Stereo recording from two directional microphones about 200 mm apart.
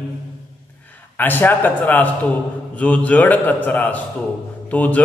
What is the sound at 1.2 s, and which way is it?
A man's voice, 10° left (ahead or behind).